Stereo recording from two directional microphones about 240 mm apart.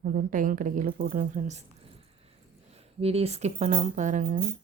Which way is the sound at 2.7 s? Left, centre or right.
Right.